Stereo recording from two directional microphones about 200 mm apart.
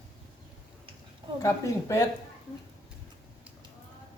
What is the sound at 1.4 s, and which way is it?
Speech, 15° left (ahead or behind).